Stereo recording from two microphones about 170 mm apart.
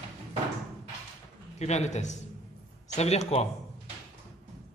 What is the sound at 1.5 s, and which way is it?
A man's voice, 40° left (ahead or behind).